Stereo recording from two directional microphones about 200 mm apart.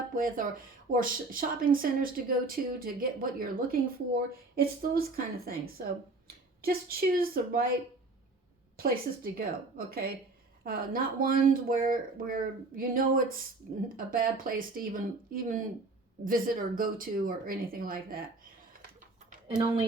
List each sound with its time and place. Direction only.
0.1 s speech: 45° right (ahead or behind)
8.8 s speech: 45° right (ahead or behind)